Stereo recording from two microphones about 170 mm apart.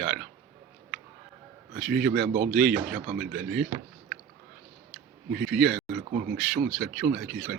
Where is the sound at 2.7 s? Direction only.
55° right (ahead or behind).